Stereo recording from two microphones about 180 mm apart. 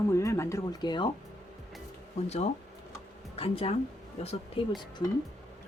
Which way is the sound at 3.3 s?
30° left (ahead or behind).